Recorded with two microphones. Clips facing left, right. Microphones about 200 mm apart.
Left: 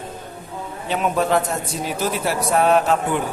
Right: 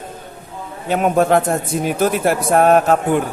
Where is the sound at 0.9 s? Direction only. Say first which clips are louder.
Right 5 dB; 50° right (ahead or behind).